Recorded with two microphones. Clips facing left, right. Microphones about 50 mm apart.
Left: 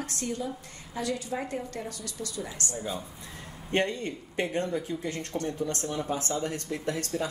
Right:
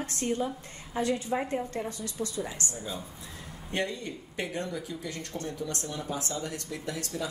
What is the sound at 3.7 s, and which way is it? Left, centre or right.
Speech, left.